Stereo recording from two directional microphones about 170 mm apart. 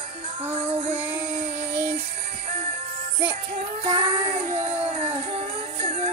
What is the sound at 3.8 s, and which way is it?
Child singing, 35° right (ahead or behind).